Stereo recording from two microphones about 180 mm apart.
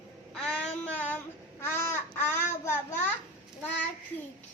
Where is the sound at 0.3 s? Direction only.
5° left (ahead or behind).